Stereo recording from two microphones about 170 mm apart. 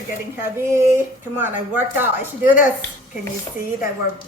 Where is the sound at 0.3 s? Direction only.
15° right (ahead or behind).